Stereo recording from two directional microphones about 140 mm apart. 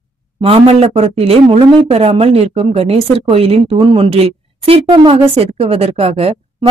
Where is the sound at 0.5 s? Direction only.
45° right (ahead or behind).